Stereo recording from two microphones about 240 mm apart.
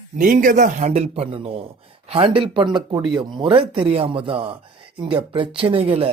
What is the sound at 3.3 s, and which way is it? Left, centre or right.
A man's voice, right.